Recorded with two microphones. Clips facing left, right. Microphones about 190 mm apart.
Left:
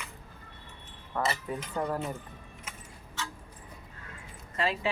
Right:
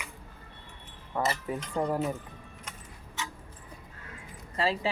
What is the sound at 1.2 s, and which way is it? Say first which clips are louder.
Speech: right 1 dB; 15° right (ahead or behind).